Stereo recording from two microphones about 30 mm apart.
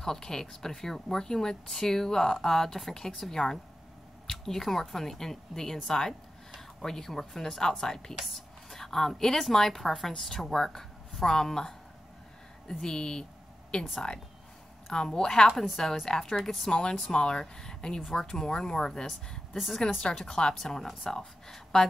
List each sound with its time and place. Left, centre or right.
0.0 s a woman's voice: centre
15.0 s speech: left
15.4 s a woman's voice: centre
15.7 s speech: centre; by 17.4 s left
17.4 s speech: left
21.7 s speech: left